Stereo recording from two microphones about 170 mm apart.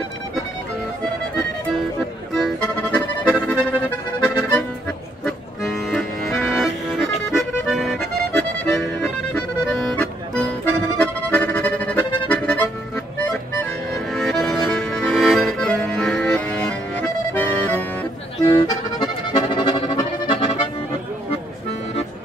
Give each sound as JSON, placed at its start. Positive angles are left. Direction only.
{"t": 2.3, "sound": "accordion", "side_deg": 5}